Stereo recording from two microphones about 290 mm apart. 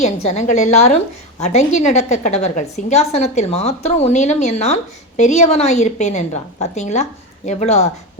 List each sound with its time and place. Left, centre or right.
0.0 s a woman's voice: left